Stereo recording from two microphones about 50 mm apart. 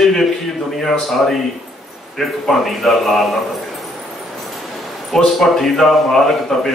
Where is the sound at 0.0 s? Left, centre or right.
Centre.